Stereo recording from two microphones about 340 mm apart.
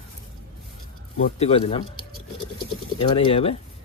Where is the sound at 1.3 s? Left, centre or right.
Centre.